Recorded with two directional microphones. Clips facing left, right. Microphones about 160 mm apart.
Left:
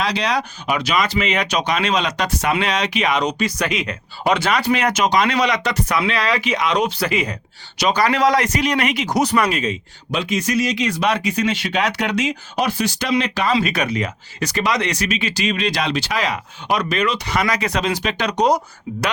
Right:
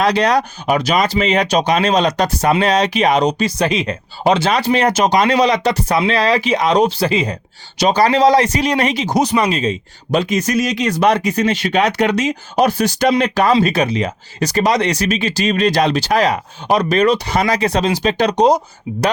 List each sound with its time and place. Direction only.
0.0 s speech: 50° right (ahead or behind); by 9.7 s 25° right (ahead or behind)
10.1 s speech: 45° right (ahead or behind); by 18.6 s 25° right (ahead or behind)